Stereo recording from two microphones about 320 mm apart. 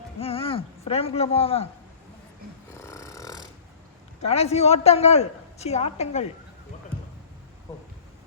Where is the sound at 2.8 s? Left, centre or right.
Centre.